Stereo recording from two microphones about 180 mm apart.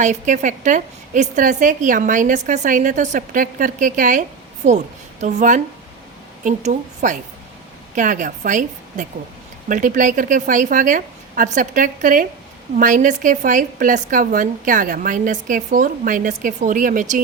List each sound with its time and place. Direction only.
0.0 s a woman's voice: 45° right (ahead or behind)
5.2 s a woman's voice: 40° right (ahead or behind)